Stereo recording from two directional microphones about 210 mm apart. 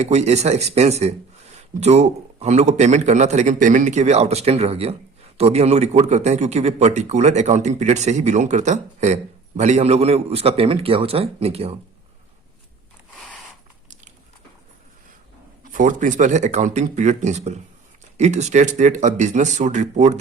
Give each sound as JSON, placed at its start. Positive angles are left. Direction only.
{"t": 0.0, "sound": "a man's voice", "side_deg": -30}
{"t": 15.6, "sound": "speech", "side_deg": -40}